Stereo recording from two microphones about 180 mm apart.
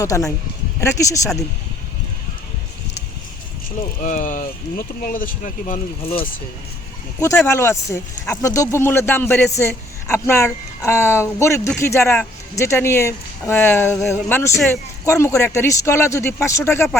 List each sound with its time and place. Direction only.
0.0 s speech: 15° left (ahead or behind)
4.0 s speech: 45° left (ahead or behind)
6.0 s speech: 30° left (ahead or behind)
7.3 s speech: 15° left (ahead or behind)